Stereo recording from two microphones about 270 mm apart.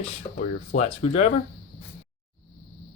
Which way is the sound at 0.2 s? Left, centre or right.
Centre.